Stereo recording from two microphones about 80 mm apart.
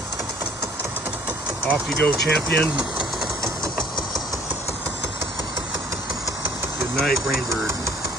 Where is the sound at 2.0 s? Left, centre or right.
Left.